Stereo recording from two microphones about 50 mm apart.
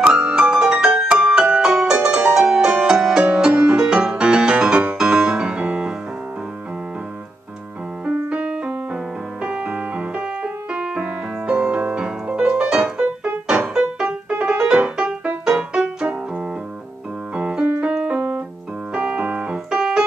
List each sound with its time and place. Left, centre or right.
0.2 s music: centre
4.9 s piano: centre
8.0 s keyboard: right
9.4 s music: right
17.3 s keyboard: right